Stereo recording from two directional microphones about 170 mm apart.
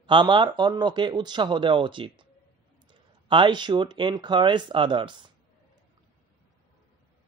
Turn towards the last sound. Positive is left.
turn(degrees=-30)  # may be behind; listen again after turning